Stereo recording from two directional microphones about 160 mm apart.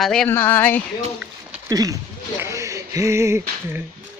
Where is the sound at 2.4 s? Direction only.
20° right (ahead or behind).